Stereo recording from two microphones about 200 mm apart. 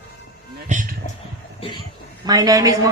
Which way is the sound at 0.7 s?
40° right (ahead or behind).